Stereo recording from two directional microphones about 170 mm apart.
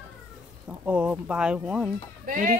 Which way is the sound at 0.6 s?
10° right (ahead or behind).